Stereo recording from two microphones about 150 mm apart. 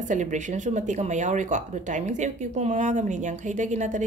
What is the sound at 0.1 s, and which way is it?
Speech, 55° right (ahead or behind).